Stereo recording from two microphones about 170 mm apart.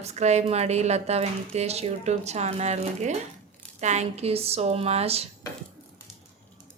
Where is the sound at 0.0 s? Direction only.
40° right (ahead or behind).